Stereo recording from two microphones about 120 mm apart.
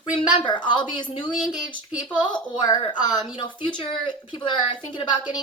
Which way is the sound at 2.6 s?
35° left (ahead or behind).